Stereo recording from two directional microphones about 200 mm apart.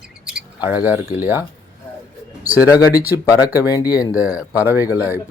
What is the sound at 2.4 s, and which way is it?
Speech, 10° right (ahead or behind).